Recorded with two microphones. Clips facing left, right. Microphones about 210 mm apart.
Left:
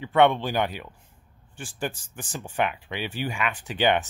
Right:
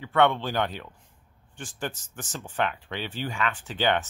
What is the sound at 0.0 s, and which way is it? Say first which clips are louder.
Speech: left 3 dB; 15° left (ahead or behind).